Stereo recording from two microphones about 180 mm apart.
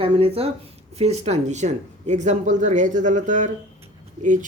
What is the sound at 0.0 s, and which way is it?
Speech, 30° right (ahead or behind).